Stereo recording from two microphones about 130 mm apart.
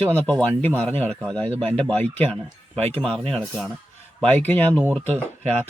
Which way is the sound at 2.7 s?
50° right (ahead or behind).